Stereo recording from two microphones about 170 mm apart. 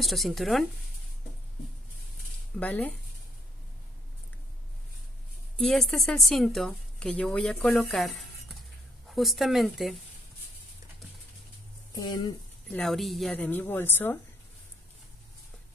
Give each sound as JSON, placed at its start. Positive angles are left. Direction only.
{"t": 0.0, "sound": "a woman's voice", "side_deg": 0}
{"t": 2.6, "sound": "speech", "side_deg": 10}
{"t": 5.6, "sound": "a woman's voice", "side_deg": 0}
{"t": 11.9, "sound": "speech", "side_deg": 25}
{"t": 12.6, "sound": "speech", "side_deg": 5}